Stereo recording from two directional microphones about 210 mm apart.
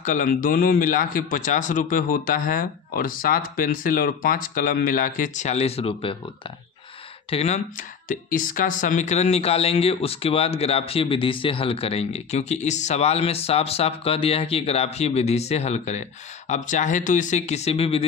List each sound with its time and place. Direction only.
0.0 s speech: 40° left (ahead or behind)
7.2 s speech: 30° left (ahead or behind)